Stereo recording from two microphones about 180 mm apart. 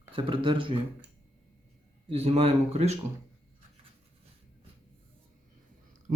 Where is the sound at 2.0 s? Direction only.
35° right (ahead or behind).